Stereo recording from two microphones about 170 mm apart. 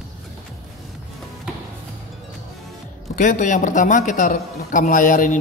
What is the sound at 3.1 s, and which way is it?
A man's voice, 50° left (ahead or behind).